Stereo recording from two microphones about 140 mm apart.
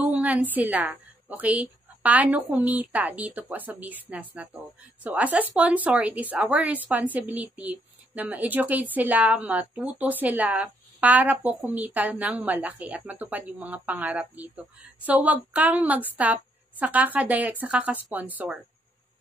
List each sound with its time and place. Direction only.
0.0 s a woman's voice: 10° right (ahead or behind)